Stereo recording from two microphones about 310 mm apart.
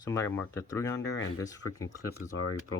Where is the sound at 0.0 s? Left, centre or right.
Centre.